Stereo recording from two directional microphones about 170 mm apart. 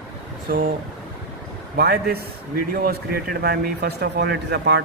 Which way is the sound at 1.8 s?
65° right (ahead or behind).